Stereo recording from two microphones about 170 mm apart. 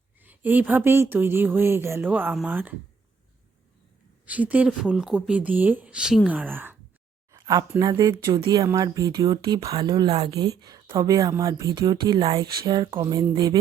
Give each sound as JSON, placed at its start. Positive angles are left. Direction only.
{"t": 0.2, "sound": "speech", "side_deg": -10}
{"t": 4.3, "sound": "speech", "side_deg": -10}